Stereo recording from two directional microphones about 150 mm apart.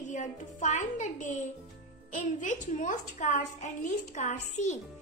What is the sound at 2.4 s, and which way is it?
A woman's voice, 55° left (ahead or behind).